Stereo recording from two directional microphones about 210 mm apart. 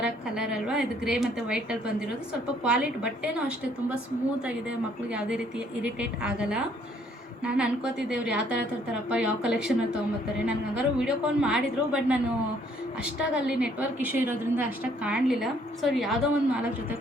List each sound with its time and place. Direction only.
0.0 s a woman's voice: 5° right (ahead or behind)
5.1 s a woman's voice: 5° right (ahead or behind)